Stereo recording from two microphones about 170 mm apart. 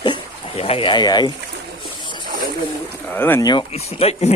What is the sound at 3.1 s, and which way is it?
Speech, 10° left (ahead or behind).